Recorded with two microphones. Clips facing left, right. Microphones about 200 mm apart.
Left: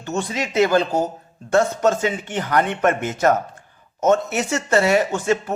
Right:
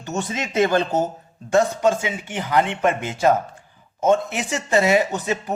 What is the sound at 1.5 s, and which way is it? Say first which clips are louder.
Speech: even; 15° right (ahead or behind).